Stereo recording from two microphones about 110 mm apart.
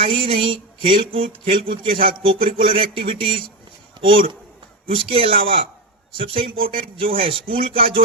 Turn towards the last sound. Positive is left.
turn(degrees=-60)  # may be behind; listen again after turning